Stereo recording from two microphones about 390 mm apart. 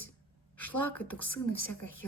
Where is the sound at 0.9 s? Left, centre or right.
Left.